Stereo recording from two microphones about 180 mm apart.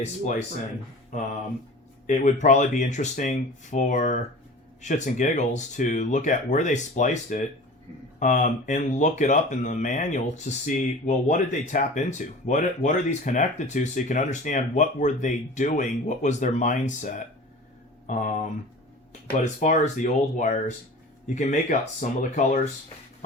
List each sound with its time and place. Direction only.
0.0 s speech: 40° left (ahead or behind)
2.0 s speech: 45° left (ahead or behind)
19.3 s speech: 50° left (ahead or behind)